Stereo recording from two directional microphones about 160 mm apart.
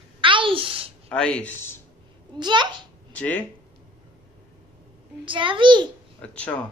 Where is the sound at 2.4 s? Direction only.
30° right (ahead or behind).